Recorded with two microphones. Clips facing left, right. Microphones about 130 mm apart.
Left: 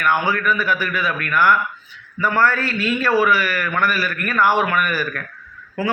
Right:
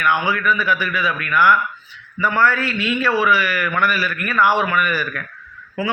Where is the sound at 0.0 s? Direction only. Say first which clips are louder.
Even; 45° left (ahead or behind).